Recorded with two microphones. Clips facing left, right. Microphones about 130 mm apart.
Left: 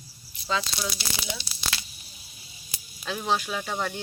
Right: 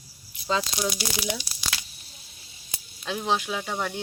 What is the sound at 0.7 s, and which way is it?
Speech, 15° right (ahead or behind).